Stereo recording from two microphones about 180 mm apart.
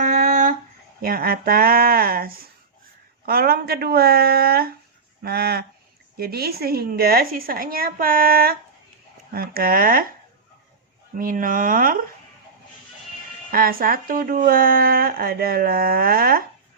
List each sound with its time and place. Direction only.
0.0 s a sound: 45° right (ahead or behind)
1.0 s speech: 55° right (ahead or behind)
11.1 s speech: 50° right (ahead or behind)
13.5 s speech: 55° right (ahead or behind)